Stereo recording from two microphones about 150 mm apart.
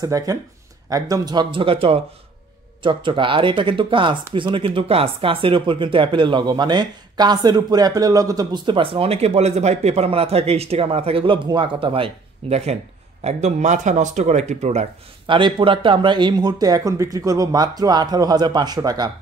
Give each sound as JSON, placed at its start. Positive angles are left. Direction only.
{"t": 0.0, "sound": "speech", "side_deg": -25}
{"t": 15.2, "sound": "speech", "side_deg": -35}